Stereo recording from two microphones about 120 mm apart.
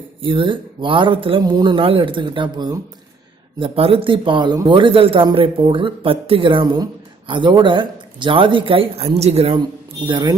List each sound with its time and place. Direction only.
0.2 s a man's voice: 45° right (ahead or behind)
3.6 s a man's voice: 50° right (ahead or behind)
10.1 s speech: 40° right (ahead or behind)